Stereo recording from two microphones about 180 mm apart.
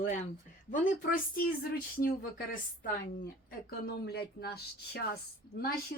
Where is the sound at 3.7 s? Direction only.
60° left (ahead or behind).